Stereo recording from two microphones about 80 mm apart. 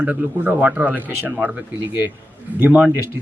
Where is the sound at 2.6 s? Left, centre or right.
Right.